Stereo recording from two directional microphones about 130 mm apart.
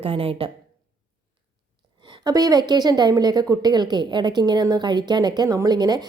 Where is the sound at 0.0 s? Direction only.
45° right (ahead or behind).